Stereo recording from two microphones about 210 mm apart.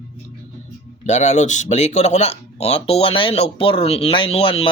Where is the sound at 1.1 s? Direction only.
35° left (ahead or behind).